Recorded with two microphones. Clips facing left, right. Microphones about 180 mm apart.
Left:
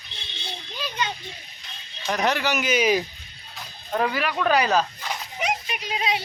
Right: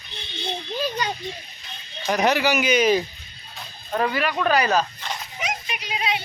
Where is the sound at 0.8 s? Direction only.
40° right (ahead or behind).